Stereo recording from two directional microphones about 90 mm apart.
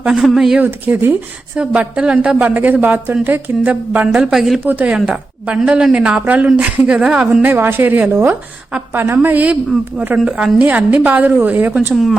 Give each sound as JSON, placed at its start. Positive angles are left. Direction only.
{"t": 0.0, "sound": "speech", "side_deg": -10}
{"t": 0.6, "sound": "a woman's voice", "side_deg": -20}
{"t": 1.5, "sound": "speech", "side_deg": -10}
{"t": 4.6, "sound": "a woman's voice", "side_deg": -20}